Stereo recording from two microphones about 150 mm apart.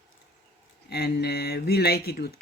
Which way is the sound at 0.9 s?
90° left.